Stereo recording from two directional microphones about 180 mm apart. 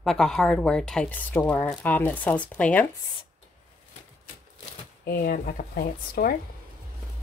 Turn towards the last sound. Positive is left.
turn(degrees=55)  # may be behind; listen again after turning